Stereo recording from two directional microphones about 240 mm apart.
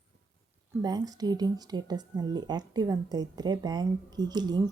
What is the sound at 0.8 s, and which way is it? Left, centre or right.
Speech, centre.